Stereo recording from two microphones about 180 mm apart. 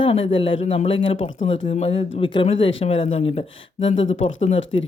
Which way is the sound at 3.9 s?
90° left.